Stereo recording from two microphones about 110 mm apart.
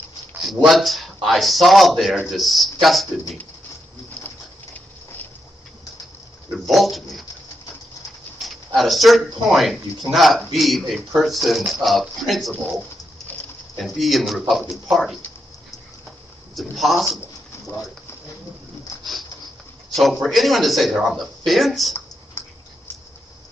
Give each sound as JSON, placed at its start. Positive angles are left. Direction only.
{"t": 0.4, "sound": "speech", "side_deg": 0}
{"t": 4.2, "sound": "pigeon", "side_deg": 10}
{"t": 4.7, "sound": "a sound", "side_deg": 15}
{"t": 6.6, "sound": "speech", "side_deg": 0}
{"t": 8.4, "sound": "speech", "side_deg": 0}
{"t": 13.7, "sound": "speech", "side_deg": 0}
{"t": 16.7, "sound": "speech", "side_deg": 0}
{"t": 20.0, "sound": "speech", "side_deg": 0}
{"t": 22.4, "sound": "a sound", "side_deg": 25}